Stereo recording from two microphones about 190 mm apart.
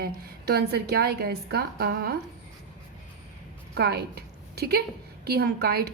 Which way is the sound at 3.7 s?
60° right (ahead or behind).